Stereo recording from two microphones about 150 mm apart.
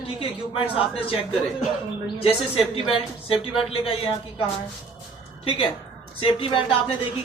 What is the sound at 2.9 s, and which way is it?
Speech, 35° left (ahead or behind).